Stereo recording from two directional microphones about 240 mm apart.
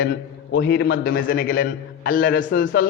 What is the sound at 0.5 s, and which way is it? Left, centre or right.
A man's voice, left.